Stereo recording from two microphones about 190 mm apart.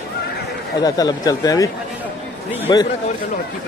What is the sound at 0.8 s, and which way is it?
Speech, 20° left (ahead or behind).